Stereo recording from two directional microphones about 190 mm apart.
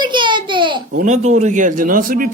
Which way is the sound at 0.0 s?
25° right (ahead or behind).